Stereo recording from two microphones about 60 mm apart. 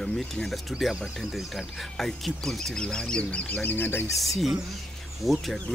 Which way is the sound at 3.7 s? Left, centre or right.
Left.